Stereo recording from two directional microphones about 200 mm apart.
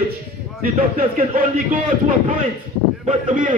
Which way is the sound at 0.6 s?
45° right (ahead or behind).